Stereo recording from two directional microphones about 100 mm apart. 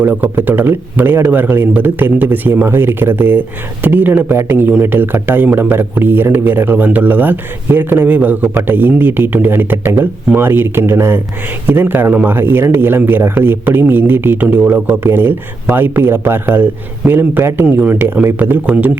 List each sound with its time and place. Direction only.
0.0 s speech: 15° right (ahead or behind)